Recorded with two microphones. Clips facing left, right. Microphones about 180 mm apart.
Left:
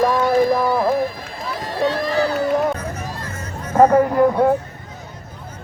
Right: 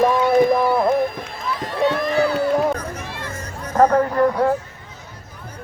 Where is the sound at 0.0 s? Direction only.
Centre (ahead or behind).